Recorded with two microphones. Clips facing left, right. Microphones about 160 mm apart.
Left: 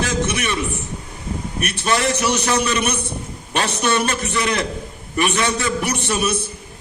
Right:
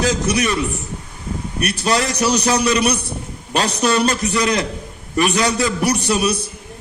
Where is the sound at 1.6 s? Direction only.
35° right (ahead or behind).